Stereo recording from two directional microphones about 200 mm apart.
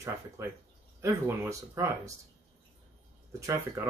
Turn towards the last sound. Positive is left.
turn(degrees=-15)  # may be behind; listen again after turning